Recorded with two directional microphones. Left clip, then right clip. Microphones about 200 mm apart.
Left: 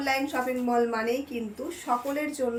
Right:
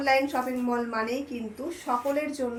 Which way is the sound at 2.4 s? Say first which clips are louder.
Left 2 dB; 25° left (ahead or behind).